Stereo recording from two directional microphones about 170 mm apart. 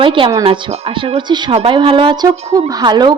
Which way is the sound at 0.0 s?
30° right (ahead or behind).